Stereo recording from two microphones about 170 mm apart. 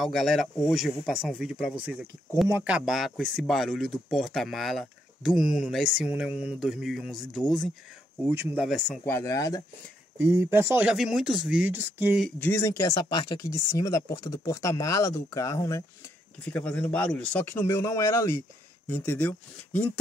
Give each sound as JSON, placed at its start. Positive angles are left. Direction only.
{"t": 0.0, "sound": "speech", "side_deg": 0}
{"t": 8.3, "sound": "speech", "side_deg": -10}
{"t": 8.6, "sound": "speech", "side_deg": 0}
{"t": 9.0, "sound": "speech", "side_deg": 15}
{"t": 10.1, "sound": "speech", "side_deg": -15}
{"t": 12.2, "sound": "speech", "side_deg": 5}